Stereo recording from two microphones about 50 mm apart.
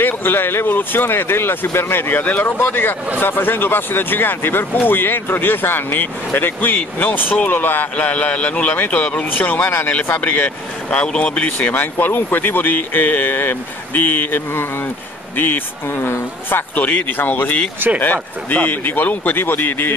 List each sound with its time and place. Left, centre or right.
0.0 s speech: left
7.9 s speech: left
9.3 s speech: left
9.8 s speech: left
11.7 s speech: left
16.7 s speech: left